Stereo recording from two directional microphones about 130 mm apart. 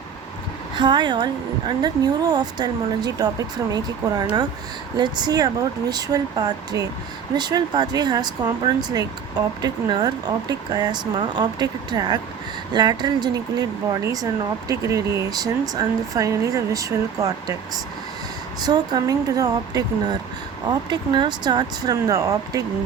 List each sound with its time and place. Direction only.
0.8 s a woman's voice: 35° right (ahead or behind)
18.6 s a woman's voice: 30° right (ahead or behind)